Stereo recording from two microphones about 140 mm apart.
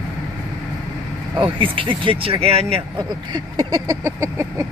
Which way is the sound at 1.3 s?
40° right (ahead or behind).